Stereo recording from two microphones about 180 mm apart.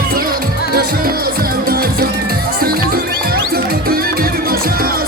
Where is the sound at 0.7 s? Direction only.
55° right (ahead or behind).